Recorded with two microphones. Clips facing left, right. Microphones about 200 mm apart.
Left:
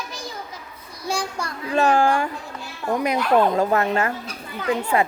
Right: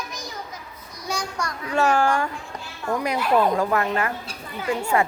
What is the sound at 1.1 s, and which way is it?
Speech, 30° left (ahead or behind).